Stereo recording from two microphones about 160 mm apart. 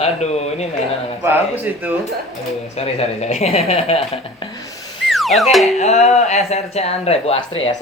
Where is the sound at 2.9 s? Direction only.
40° left (ahead or behind).